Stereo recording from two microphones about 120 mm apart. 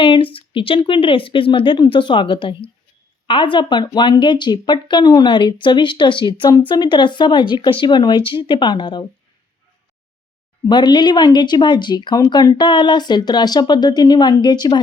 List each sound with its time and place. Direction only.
0.0 s a sound: 45° left (ahead or behind)
0.5 s speech: 45° left (ahead or behind)
10.7 s speech: 35° left (ahead or behind)